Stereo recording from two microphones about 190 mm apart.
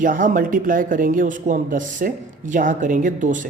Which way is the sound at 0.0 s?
45° right (ahead or behind).